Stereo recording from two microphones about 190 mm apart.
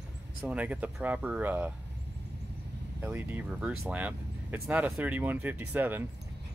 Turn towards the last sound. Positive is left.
turn(degrees=-10)  # may be behind; listen again after turning